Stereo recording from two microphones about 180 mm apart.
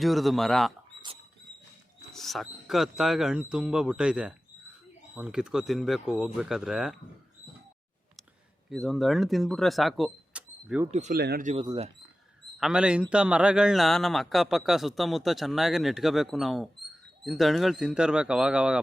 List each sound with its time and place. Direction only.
0.0 s a man's voice: centre (ahead or behind)
2.1 s a man's voice: centre (ahead or behind)
8.7 s speech: centre (ahead or behind)
10.9 s speech: 40° right (ahead or behind)
11.2 s speech: 65° right (ahead or behind)
12.5 s a man's voice: 5° right (ahead or behind)